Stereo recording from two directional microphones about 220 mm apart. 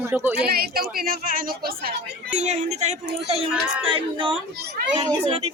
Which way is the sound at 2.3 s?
30° right (ahead or behind).